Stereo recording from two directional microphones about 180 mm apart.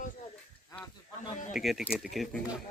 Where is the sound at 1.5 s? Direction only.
Centre (ahead or behind).